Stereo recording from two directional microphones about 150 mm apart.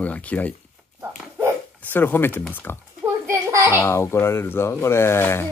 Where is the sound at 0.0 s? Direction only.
10° left (ahead or behind).